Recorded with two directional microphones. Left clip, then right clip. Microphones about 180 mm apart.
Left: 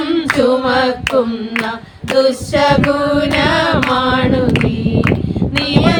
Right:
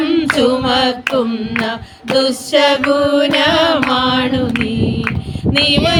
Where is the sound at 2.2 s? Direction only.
5° right (ahead or behind).